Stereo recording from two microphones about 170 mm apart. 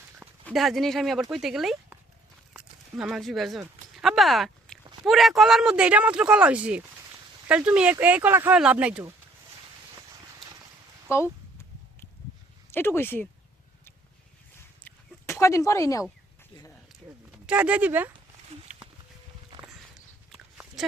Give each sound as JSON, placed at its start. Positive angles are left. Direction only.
{"t": 0.4, "sound": "speech", "side_deg": 0}
{"t": 2.5, "sound": "a sound", "side_deg": -5}
{"t": 5.0, "sound": "speech", "side_deg": 0}
{"t": 11.1, "sound": "speech", "side_deg": 15}
{"t": 12.7, "sound": "speech", "side_deg": 15}
{"t": 14.8, "sound": "chicken", "side_deg": 15}
{"t": 17.4, "sound": "speech", "side_deg": -5}
{"t": 20.3, "sound": "a sound", "side_deg": 0}